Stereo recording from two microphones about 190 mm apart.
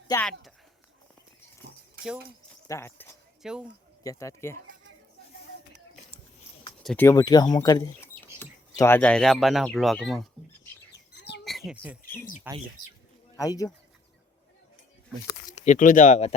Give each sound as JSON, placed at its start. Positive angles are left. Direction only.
{"t": 0.1, "sound": "speech", "side_deg": 20}
{"t": 2.6, "sound": "speech", "side_deg": 15}
{"t": 3.4, "sound": "speech", "side_deg": -5}
{"t": 4.0, "sound": "speech", "side_deg": 15}
{"t": 6.8, "sound": "speech", "side_deg": 10}
{"t": 10.9, "sound": "bird", "side_deg": 60}
{"t": 11.4, "sound": "a sound", "side_deg": 0}
{"t": 12.5, "sound": "speech", "side_deg": -10}
{"t": 13.3, "sound": "speech", "side_deg": 20}
{"t": 15.4, "sound": "speech", "side_deg": 35}